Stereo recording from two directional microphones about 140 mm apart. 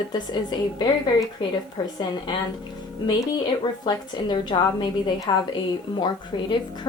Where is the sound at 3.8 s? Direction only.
30° left (ahead or behind).